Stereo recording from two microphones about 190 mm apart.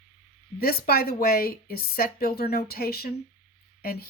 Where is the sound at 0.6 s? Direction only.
55° left (ahead or behind).